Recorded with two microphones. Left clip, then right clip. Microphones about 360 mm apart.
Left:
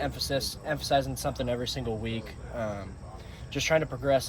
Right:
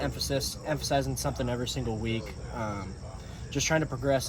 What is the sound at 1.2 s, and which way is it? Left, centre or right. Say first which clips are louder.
Speech: left 1 dB; centre.